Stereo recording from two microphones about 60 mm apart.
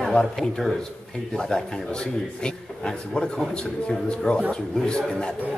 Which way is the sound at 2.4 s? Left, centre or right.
Centre.